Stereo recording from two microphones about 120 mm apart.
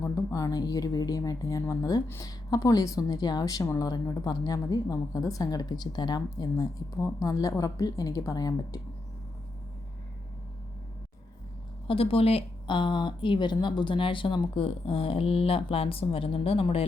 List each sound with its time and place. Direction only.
0.0 s a woman's voice: 25° left (ahead or behind)
11.9 s speech: 50° left (ahead or behind)